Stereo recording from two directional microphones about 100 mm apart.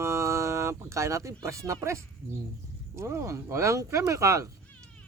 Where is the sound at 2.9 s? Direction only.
30° right (ahead or behind).